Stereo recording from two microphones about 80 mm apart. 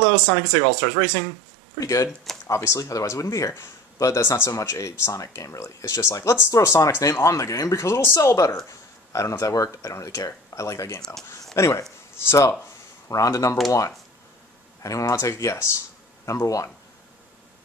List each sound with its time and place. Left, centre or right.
0.0 s speech: left